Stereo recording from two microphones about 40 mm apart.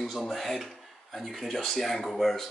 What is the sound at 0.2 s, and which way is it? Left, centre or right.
Speech, centre.